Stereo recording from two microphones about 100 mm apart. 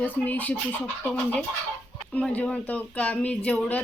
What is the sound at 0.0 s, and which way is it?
Speech, 15° left (ahead or behind).